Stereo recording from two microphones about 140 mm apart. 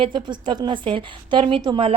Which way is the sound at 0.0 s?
35° right (ahead or behind).